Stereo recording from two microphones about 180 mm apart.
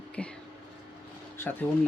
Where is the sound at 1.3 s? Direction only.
15° left (ahead or behind).